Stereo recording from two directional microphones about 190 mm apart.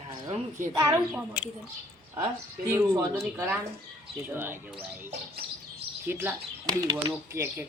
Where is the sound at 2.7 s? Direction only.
15° right (ahead or behind).